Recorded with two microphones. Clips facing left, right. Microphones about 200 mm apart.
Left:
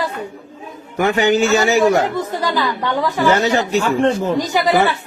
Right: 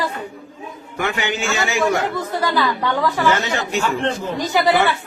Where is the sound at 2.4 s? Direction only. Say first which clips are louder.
Right 2 dB; 15° left (ahead or behind).